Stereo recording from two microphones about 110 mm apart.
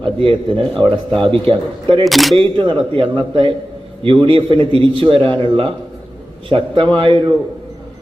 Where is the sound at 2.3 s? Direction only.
50° right (ahead or behind).